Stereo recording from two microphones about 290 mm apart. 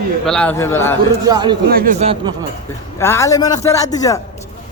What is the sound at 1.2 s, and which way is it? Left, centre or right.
Speech, centre.